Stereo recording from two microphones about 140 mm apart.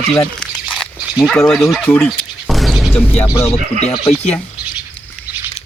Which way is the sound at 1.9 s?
Centre (ahead or behind).